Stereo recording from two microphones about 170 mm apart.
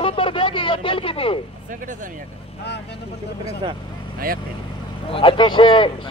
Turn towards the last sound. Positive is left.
turn(degrees=30)  # may be behind; listen again after turning